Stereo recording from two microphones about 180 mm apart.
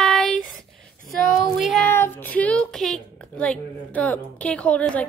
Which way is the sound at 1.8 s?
10° left (ahead or behind).